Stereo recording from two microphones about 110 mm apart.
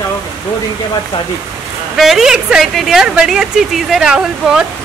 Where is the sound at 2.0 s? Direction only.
5° right (ahead or behind).